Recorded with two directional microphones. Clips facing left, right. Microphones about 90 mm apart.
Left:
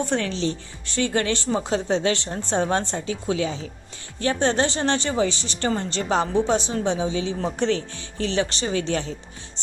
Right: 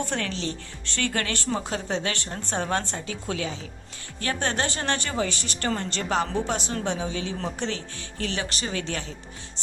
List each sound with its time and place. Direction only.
0.0 s speech: 25° left (ahead or behind)
5.3 s speech: 55° right (ahead or behind)
5.5 s speech: 20° left (ahead or behind)
6.1 s a woman's voice: 30° left (ahead or behind)
6.7 s speech: 15° left (ahead or behind)
8.2 s speech: 30° left (ahead or behind)